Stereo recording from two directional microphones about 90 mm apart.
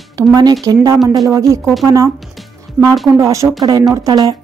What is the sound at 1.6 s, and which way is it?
Speech, centre (ahead or behind).